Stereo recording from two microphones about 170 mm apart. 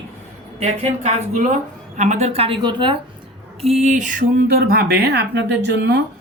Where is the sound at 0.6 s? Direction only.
40° right (ahead or behind); by 5.9 s 80° right.